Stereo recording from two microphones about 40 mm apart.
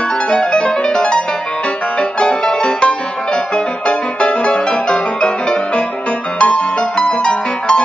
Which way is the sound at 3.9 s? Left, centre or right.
Left.